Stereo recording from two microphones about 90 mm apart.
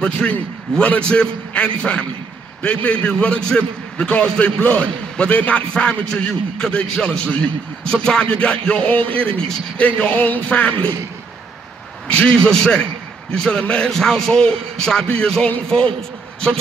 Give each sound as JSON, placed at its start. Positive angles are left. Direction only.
{"t": 0.0, "sound": "a man's voice", "side_deg": 10}
{"t": 12.1, "sound": "a man's voice", "side_deg": 10}